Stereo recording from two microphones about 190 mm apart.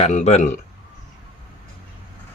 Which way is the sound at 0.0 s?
35° left (ahead or behind).